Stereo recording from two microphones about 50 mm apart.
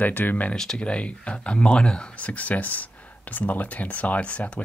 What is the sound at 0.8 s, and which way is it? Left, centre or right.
Speech, left.